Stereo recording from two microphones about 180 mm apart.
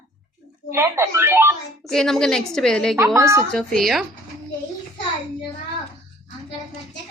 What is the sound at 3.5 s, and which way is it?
Speech, 5° left (ahead or behind).